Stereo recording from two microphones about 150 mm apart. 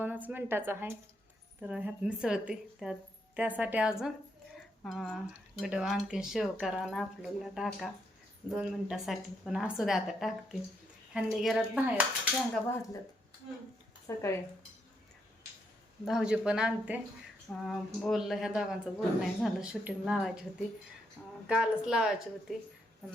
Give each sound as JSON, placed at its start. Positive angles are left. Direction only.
{"t": 0.0, "sound": "a woman's voice", "side_deg": -10}
{"t": 4.8, "sound": "a woman's voice", "side_deg": 0}
{"t": 14.1, "sound": "speech", "side_deg": 20}
{"t": 16.0, "sound": "a woman's voice", "side_deg": -5}